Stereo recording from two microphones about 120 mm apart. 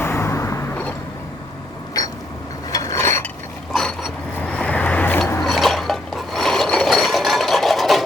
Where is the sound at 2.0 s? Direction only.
30° left (ahead or behind).